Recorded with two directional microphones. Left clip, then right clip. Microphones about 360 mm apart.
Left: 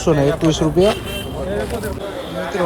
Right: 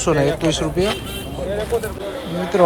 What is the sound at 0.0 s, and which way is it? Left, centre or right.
Speech, centre.